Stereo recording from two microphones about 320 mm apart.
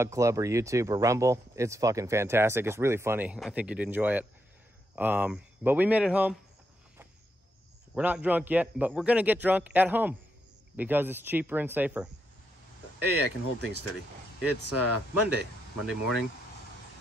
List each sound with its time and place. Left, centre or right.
0.0 s a man's voice: centre
7.9 s a man's voice: centre
13.0 s speech: left